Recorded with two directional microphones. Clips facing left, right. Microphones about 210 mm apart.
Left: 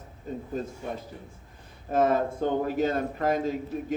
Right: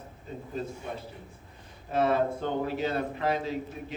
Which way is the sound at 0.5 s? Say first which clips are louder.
Left 1 dB; 45° left (ahead or behind).